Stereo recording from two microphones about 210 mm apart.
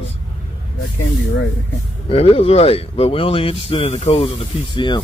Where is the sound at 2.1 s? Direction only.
25° left (ahead or behind).